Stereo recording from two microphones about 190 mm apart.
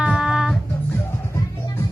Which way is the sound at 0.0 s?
5° right (ahead or behind).